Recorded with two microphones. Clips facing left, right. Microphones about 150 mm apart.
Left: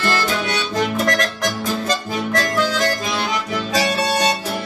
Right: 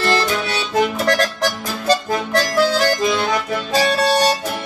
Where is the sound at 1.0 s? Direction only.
35° right (ahead or behind).